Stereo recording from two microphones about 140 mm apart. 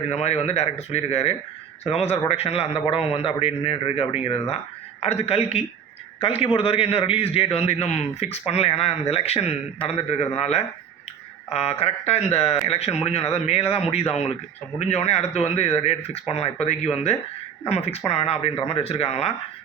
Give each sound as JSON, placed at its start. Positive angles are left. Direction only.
{"t": 0.1, "sound": "a man's voice", "side_deg": 50}